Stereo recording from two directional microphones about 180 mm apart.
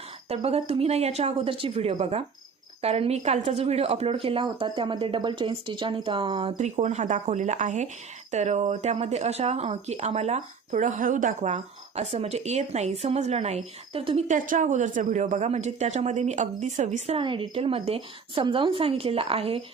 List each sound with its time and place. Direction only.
0.3 s speech: 35° right (ahead or behind)
17.2 s speech: 25° right (ahead or behind)